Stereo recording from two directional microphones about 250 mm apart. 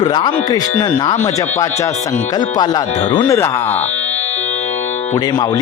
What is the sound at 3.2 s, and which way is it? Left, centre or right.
Speech, centre.